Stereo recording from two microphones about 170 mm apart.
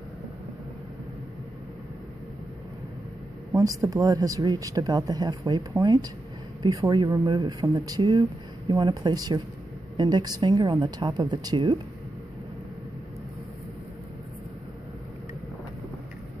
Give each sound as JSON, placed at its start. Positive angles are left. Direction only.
{"t": 3.5, "sound": "speech", "side_deg": -20}